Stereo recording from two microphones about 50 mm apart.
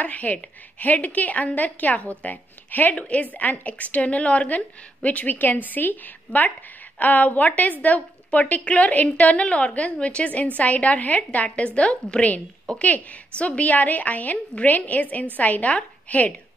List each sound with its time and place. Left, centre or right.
0.0 s a woman's voice: left